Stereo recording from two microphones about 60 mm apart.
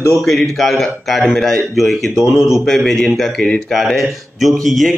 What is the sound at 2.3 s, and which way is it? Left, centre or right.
Speech, right.